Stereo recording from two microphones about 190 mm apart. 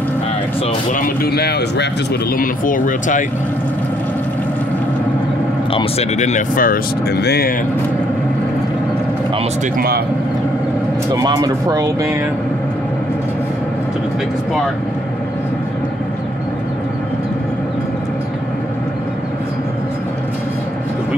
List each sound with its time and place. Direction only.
0.9 s speech: 50° left (ahead or behind)
2.3 s speech: 45° left (ahead or behind)
5.7 s speech: 30° left (ahead or behind); by 7.5 s 60° left (ahead or behind)
9.8 s speech: 55° right (ahead or behind)
11.1 s speech: 20° right (ahead or behind)